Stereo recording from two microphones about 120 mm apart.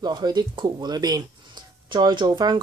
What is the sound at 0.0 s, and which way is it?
Speech, 35° right (ahead or behind).